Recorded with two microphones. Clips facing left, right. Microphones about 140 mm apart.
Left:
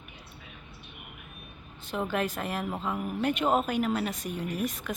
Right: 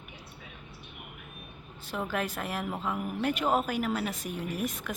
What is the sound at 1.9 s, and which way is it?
Speech, 5° left (ahead or behind).